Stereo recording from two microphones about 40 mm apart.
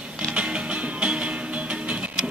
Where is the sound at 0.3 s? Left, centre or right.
Right.